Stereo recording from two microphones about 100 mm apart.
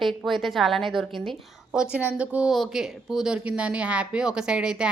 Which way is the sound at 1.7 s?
10° right (ahead or behind).